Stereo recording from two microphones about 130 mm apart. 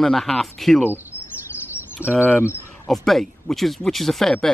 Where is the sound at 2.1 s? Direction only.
15° left (ahead or behind).